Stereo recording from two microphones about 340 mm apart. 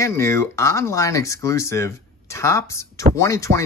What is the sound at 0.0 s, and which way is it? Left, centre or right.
Speech, centre.